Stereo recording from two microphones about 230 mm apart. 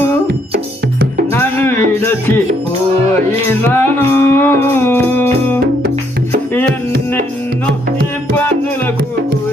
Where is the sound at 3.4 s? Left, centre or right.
Centre.